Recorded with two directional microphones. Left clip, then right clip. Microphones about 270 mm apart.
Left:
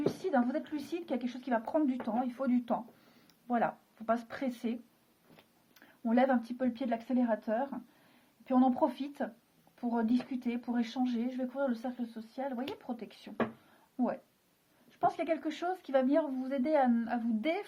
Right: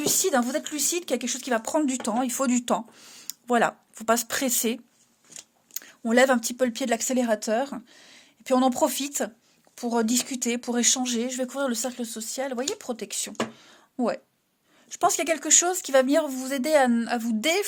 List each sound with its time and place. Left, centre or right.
0.0 s speech: right